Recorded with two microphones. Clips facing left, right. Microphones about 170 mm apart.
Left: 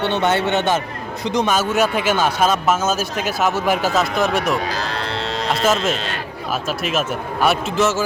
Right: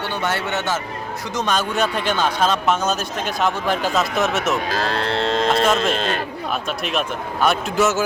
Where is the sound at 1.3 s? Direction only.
5° left (ahead or behind).